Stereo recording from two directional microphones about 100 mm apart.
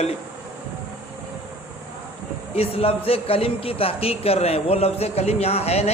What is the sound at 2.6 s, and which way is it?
Speech, 75° left (ahead or behind).